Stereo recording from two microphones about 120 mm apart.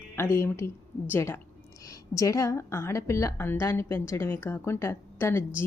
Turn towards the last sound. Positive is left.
turn(degrees=20)  # may be behind; listen again after turning